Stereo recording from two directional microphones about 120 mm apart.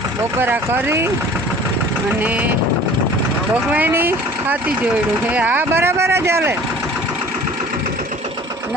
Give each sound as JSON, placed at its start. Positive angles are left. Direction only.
{"t": 0.3, "sound": "speech", "side_deg": -15}
{"t": 2.2, "sound": "speech", "side_deg": -15}
{"t": 3.7, "sound": "speech", "side_deg": -15}